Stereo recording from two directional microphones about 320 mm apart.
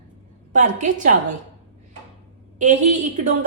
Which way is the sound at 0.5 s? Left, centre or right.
Right.